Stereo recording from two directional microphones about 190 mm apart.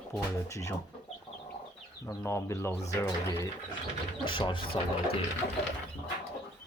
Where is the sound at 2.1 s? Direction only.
15° left (ahead or behind).